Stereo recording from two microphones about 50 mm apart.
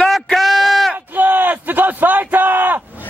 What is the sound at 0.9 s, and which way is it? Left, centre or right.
Speech, right.